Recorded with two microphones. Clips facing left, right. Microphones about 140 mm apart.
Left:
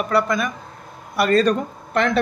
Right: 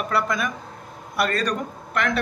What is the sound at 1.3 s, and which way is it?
Speech, 30° left (ahead or behind).